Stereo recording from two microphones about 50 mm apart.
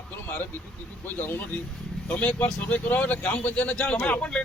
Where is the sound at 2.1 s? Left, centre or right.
Left.